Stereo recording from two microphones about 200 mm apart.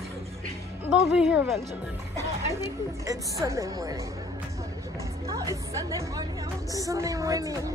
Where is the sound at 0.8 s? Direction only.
5° right (ahead or behind).